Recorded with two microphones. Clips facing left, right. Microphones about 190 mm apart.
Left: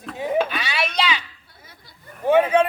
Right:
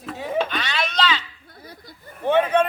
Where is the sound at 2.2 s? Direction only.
10° left (ahead or behind).